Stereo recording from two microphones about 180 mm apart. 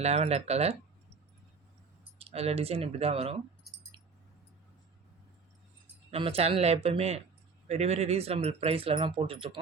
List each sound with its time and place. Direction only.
0.0 s speech: 35° right (ahead or behind)
2.1 s speech: 35° right (ahead or behind)
6.1 s speech: 30° right (ahead or behind)